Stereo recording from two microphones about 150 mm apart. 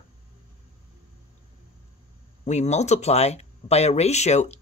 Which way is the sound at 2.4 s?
50° left (ahead or behind).